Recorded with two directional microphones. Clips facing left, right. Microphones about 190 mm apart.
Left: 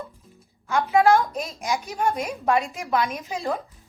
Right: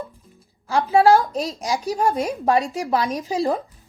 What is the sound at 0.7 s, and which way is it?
Speech, 30° right (ahead or behind).